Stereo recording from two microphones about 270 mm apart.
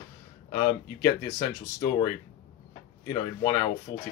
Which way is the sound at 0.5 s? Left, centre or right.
Centre.